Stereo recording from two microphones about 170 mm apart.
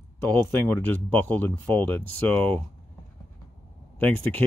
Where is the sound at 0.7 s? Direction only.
10° left (ahead or behind).